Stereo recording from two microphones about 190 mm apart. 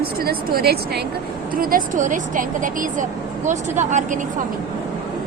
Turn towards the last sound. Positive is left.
turn(degrees=-40)  # may be behind; listen again after turning